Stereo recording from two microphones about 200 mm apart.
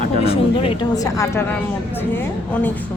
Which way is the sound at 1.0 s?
15° left (ahead or behind).